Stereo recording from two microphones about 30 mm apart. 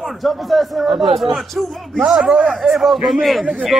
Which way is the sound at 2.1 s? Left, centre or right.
Right.